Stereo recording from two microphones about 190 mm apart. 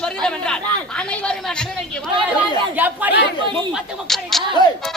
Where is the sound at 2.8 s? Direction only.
10° right (ahead or behind).